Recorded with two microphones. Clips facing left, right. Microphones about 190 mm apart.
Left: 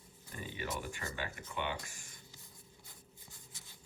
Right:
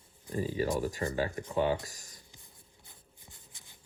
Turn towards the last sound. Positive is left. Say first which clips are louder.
# even
turn(degrees=-20)  # may be behind; listen again after turning